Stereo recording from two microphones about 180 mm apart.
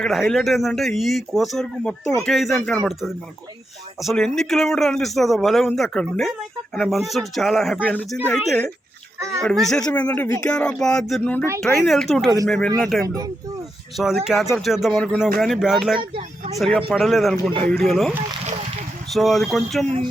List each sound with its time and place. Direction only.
0.0 s a man's voice: centre (ahead or behind)
9.1 s a sound: 15° right (ahead or behind)
9.4 s a man's voice: 5° left (ahead or behind)
19.1 s a man's voice: centre (ahead or behind)